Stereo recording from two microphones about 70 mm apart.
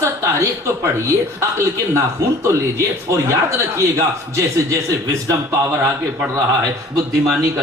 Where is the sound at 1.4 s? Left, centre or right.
Right.